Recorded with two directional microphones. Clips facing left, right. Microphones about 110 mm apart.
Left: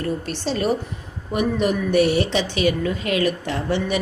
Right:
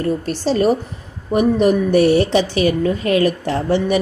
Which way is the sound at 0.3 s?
40° right (ahead or behind).